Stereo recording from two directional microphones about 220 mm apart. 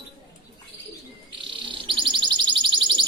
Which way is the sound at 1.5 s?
20° right (ahead or behind).